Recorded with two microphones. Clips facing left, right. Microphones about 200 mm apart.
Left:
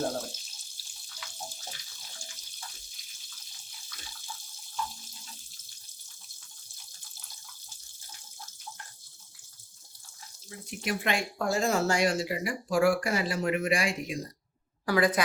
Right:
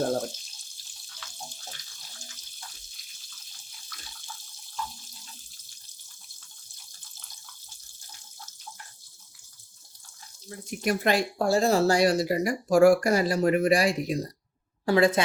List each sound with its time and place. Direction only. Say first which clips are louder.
10.7 s speech: right 6 dB; 40° right (ahead or behind)
14.8 s speech: right 4 dB; 25° right (ahead or behind)